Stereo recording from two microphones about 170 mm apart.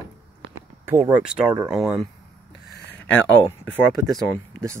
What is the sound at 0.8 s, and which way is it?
Speech, 15° right (ahead or behind).